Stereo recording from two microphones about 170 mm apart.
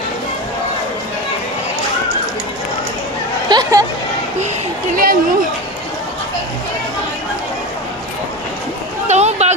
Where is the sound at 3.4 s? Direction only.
25° right (ahead or behind).